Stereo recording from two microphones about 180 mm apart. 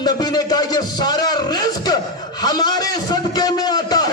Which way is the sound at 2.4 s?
20° left (ahead or behind).